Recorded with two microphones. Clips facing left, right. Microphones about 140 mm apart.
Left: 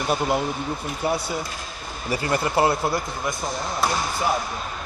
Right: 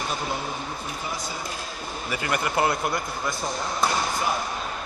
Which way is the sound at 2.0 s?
30° left (ahead or behind).